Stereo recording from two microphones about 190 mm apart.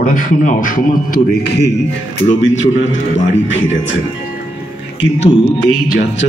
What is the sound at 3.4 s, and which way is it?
Speech, 75° left (ahead or behind).